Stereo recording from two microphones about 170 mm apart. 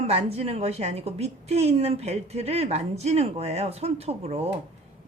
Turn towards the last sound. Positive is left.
turn(degrees=-35)  # may be behind; listen again after turning